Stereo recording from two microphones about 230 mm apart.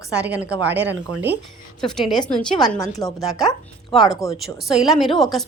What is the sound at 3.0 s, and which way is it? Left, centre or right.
Speech, centre.